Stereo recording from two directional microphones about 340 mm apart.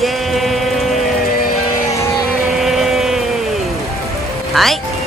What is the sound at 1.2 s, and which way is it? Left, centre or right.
Music, left.